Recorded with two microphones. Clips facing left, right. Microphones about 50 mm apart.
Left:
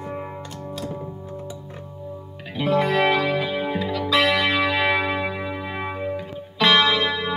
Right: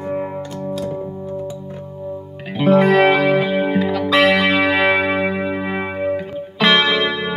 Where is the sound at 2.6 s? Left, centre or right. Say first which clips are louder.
Right 7 dB; right.